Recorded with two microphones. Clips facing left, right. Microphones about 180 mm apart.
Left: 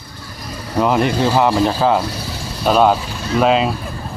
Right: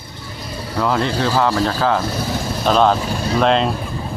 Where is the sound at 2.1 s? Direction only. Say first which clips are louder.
Right 5 dB; 50° right (ahead or behind).